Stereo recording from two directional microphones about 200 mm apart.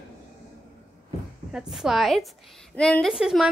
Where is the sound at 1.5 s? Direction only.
5° right (ahead or behind).